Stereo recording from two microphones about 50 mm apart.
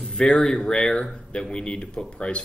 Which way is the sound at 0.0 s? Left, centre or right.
Centre.